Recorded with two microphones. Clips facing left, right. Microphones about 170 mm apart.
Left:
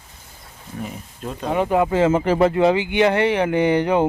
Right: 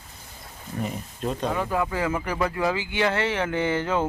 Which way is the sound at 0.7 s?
5° left (ahead or behind).